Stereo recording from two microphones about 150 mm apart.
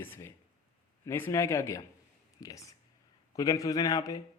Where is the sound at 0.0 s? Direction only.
15° left (ahead or behind).